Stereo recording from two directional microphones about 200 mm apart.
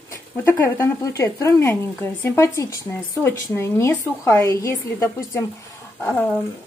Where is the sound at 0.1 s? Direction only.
15° left (ahead or behind).